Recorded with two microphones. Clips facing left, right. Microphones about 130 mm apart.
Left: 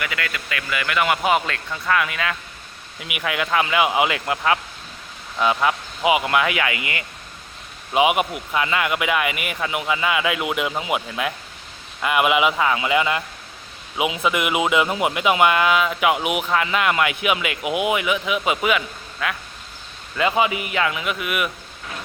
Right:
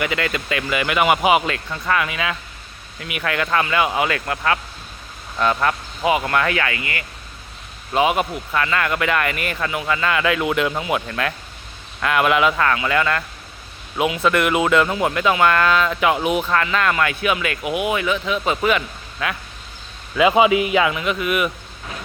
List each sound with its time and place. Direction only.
0.0 s speech: 25° right (ahead or behind); by 2.3 s 5° right (ahead or behind)
3.0 s speech: 10° left (ahead or behind)
20.3 s speech: 20° right (ahead or behind)
20.9 s speech: 5° left (ahead or behind)